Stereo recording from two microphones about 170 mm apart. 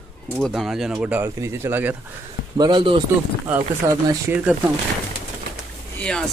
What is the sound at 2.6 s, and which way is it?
Speech, 25° right (ahead or behind).